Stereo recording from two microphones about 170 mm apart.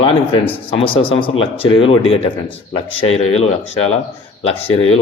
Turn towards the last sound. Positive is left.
turn(degrees=35)  # may be behind; listen again after turning